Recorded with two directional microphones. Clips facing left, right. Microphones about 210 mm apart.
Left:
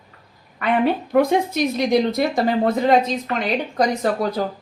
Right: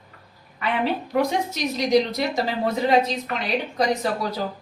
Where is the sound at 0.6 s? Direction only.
55° left (ahead or behind).